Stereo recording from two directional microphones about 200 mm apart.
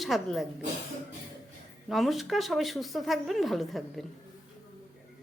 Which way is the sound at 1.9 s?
Centre (ahead or behind).